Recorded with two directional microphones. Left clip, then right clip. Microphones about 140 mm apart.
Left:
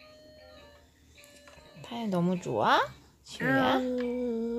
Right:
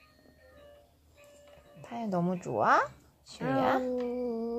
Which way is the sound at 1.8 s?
40° left (ahead or behind).